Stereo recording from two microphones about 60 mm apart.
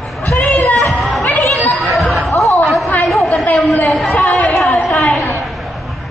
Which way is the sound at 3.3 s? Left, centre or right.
Left.